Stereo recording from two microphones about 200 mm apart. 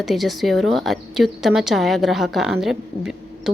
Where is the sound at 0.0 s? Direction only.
Centre (ahead or behind).